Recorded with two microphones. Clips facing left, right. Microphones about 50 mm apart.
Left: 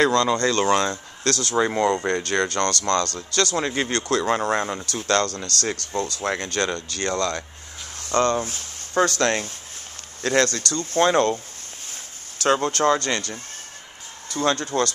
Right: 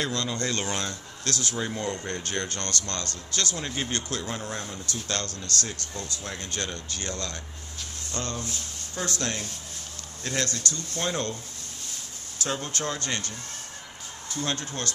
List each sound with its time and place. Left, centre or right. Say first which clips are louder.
0.0 s speech: left 11 dB; left
0.4 s speech: left 10 dB; left
1.6 s speech: left 13 dB; left
2.0 s speech: left 9 dB; left
2.8 s speech: left 13 dB; left
3.2 s speech: left 8 dB; left
10.2 s speech: left 9 dB; left
12.4 s speech: left 12 dB; left